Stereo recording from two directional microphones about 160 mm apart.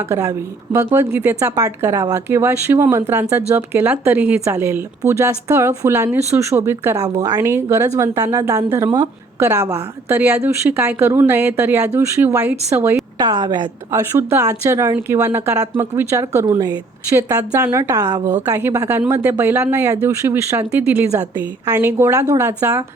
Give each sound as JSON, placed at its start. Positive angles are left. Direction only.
{"t": 0.1, "sound": "speech", "side_deg": -15}